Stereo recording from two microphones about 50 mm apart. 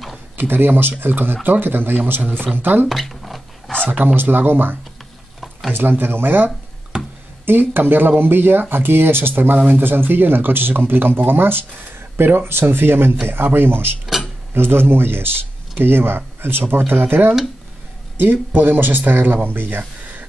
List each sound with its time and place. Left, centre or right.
0.4 s speech: right
2.9 s a sound: centre
3.9 s speech: right